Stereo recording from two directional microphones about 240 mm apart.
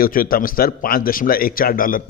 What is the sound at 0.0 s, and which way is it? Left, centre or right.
Speech, left.